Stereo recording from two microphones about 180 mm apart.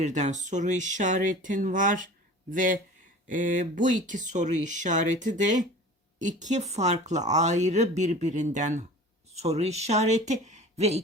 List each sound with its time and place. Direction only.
0.0 s speech: 40° right (ahead or behind)